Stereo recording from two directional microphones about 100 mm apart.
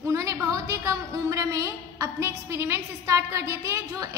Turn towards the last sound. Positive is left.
turn(degrees=-30)  # may be behind; listen again after turning